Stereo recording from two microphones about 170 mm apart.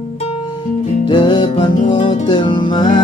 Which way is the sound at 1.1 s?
30° left (ahead or behind).